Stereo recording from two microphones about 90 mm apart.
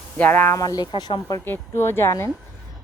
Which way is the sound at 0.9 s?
55° left (ahead or behind).